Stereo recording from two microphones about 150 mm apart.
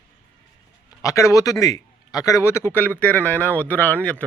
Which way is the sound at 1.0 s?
20° left (ahead or behind).